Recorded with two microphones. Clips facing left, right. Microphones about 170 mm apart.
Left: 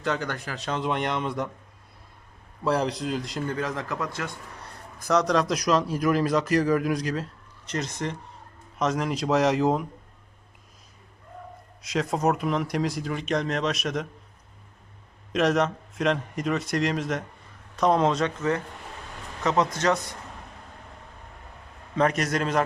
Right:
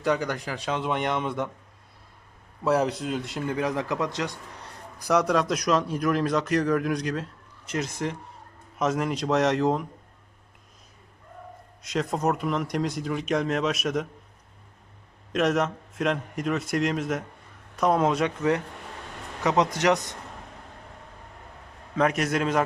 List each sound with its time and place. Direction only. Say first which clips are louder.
0.0 s speech: right 3 dB; 10° right (ahead or behind)
2.6 s speech: right 1 dB; 5° right (ahead or behind)
3.6 s speech: right 3 dB; 15° right (ahead or behind)
5.0 s speech: even; 10° right (ahead or behind)
11.8 s speech: left 1 dB; centre (ahead or behind)
15.3 s speech: left 1 dB; centre (ahead or behind); by 20.0 s 15° right (ahead or behind)
21.9 s speech: even; 5° right (ahead or behind)